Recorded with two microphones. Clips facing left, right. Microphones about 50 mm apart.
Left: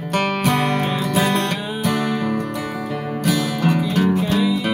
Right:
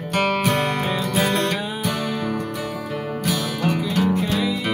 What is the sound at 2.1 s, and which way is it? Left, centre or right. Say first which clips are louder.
Music: left 3 dB; left.